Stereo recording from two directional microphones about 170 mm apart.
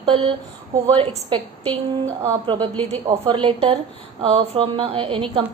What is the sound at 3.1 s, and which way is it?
A woman's voice, 30° right (ahead or behind).